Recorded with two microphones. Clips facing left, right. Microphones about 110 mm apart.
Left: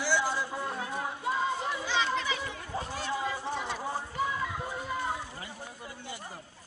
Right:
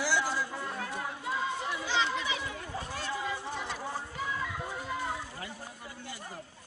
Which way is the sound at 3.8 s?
20° left (ahead or behind).